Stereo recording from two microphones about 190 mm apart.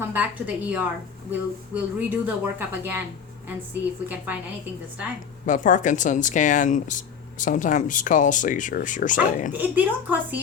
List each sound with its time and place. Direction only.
0.1 s speech: 10° right (ahead or behind)
5.5 s speech: 45° left (ahead or behind)
9.5 s speech: 10° right (ahead or behind)